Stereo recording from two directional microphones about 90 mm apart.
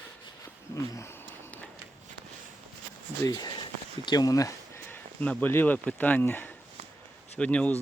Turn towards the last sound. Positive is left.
turn(degrees=15)  # may be behind; listen again after turning